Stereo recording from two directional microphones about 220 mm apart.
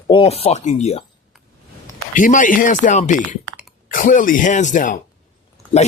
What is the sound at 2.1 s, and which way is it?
Speech, 35° left (ahead or behind).